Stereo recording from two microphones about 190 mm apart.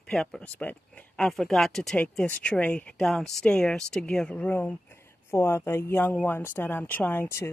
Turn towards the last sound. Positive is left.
turn(degrees=10)  # may be behind; listen again after turning